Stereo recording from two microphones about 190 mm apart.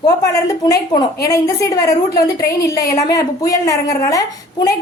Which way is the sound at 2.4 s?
55° left (ahead or behind).